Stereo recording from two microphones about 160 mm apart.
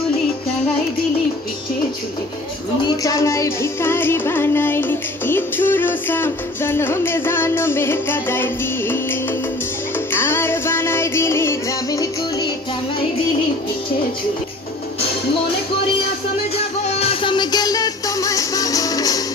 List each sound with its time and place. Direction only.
3.0 s music: 20° left (ahead or behind)
16.8 s music: 35° left (ahead or behind)